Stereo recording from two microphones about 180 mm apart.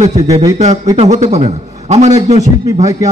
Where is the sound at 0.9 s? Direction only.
40° right (ahead or behind).